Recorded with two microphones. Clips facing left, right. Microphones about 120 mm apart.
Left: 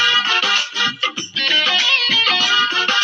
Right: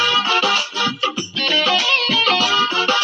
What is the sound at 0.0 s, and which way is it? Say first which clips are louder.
Music: right 3 dB; 50° right (ahead or behind).